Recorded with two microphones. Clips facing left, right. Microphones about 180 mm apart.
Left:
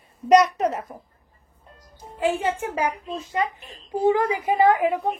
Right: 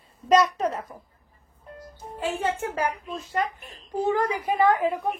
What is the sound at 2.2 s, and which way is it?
A woman's voice, 15° left (ahead or behind).